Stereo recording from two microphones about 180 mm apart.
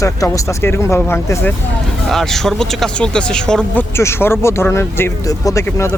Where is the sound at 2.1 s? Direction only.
Centre (ahead or behind).